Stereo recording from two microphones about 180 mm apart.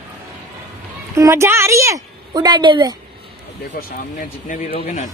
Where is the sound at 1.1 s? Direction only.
15° right (ahead or behind).